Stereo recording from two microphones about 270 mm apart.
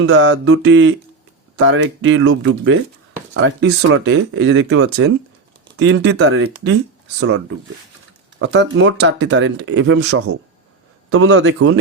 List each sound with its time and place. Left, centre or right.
0.0 s speech: right